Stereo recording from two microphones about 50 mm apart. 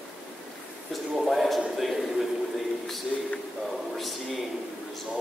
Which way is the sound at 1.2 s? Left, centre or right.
Centre.